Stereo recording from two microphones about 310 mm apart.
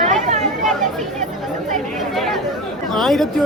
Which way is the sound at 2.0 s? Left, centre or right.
Centre.